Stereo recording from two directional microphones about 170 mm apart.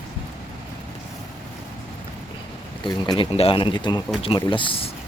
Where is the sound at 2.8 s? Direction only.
30° left (ahead or behind).